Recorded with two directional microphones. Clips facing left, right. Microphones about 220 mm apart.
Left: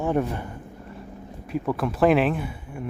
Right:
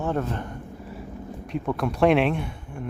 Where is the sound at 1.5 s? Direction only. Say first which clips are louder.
Left 1 dB; 5° left (ahead or behind).